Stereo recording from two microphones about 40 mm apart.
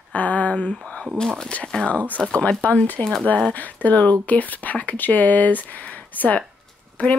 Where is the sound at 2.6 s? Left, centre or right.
Left.